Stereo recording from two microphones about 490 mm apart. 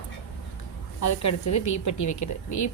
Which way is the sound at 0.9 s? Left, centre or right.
Left.